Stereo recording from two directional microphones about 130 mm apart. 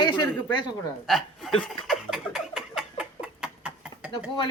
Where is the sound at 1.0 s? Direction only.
Centre (ahead or behind).